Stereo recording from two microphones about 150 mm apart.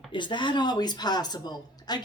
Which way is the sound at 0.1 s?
30° left (ahead or behind).